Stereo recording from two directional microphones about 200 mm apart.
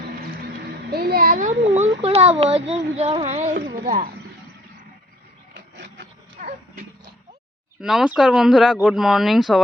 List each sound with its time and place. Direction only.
0.4 s a sound: 50° right (ahead or behind); by 2.2 s 30° right (ahead or behind)
2.4 s a child's voice: 30° right (ahead or behind)
3.5 s a woman's voice: 45° right (ahead or behind)
5.5 s wood: 60° right (ahead or behind)
7.8 s speech: centre (ahead or behind)